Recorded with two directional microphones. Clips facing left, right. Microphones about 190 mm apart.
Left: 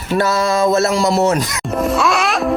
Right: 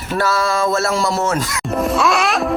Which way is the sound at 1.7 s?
Centre (ahead or behind).